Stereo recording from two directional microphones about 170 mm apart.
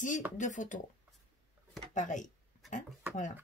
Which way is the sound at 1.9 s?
45° left (ahead or behind).